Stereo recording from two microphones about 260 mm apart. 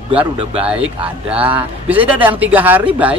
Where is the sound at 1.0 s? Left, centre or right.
Centre.